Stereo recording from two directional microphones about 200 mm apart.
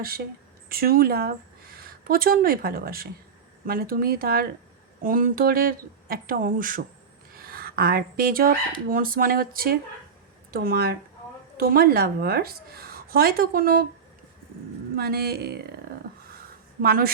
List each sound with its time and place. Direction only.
0.7 s speech: 50° right (ahead or behind)
14.9 s speech: 50° right (ahead or behind)
15.9 s a sound: 45° right (ahead or behind)
16.8 s speech: 50° right (ahead or behind)